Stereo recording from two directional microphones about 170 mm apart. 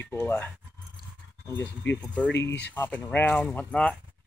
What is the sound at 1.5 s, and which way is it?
Speech, 10° left (ahead or behind).